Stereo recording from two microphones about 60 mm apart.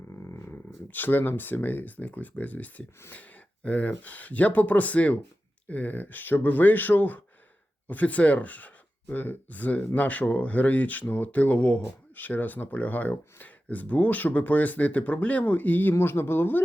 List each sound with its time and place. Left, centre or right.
0.2 s dog: left
0.5 s speech: left